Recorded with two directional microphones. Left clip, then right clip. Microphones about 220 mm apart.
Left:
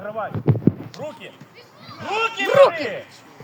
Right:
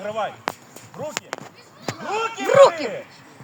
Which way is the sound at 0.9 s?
35° right (ahead or behind).